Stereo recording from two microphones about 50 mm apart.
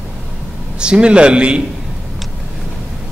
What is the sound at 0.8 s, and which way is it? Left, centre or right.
Speech, centre.